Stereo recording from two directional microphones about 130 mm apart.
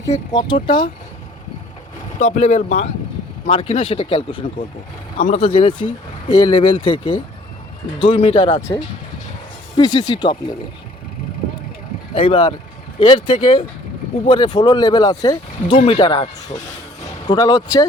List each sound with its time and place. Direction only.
0.3 s speech: 35° left (ahead or behind)
2.1 s speech: 60° left (ahead or behind)
3.5 s speech: 50° left (ahead or behind)
5.2 s speech: 55° left (ahead or behind); by 8.6 s 35° left (ahead or behind)
9.7 s speech: 35° left (ahead or behind)
12.1 s speech: 45° left (ahead or behind)
17.2 s speech: 30° left (ahead or behind)